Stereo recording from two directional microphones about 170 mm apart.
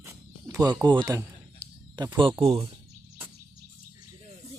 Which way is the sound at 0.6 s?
25° right (ahead or behind).